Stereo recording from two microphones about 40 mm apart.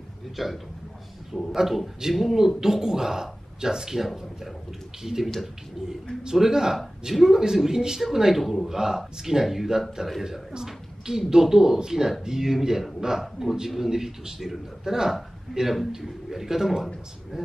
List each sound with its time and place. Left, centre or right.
0.4 s a man's voice: centre